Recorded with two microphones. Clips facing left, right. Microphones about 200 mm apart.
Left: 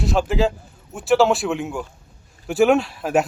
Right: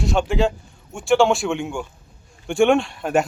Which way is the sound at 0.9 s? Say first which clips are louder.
Even; centre (ahead or behind).